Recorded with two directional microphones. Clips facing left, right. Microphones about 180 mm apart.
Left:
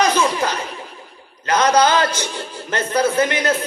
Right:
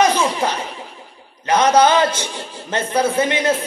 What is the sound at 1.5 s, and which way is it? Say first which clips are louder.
A man's voice: right 2 dB; 25° right (ahead or behind).